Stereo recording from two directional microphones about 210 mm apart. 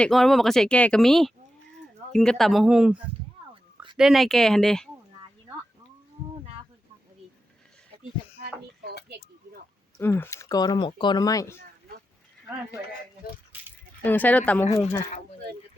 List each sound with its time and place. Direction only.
0.0 s speech: centre (ahead or behind)
10.0 s speech: 10° left (ahead or behind)
13.5 s a sound: 10° right (ahead or behind)
14.0 s speech: 10° left (ahead or behind)